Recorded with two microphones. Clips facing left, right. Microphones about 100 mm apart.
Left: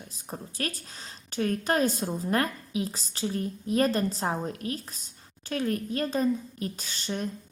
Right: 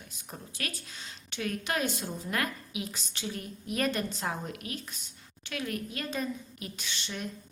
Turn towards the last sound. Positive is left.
turn(degrees=40)  # may be behind; listen again after turning